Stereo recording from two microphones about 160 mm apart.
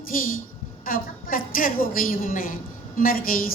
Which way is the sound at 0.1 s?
60° left (ahead or behind).